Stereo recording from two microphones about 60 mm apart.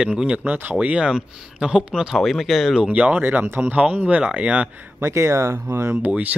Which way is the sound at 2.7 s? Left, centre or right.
Right.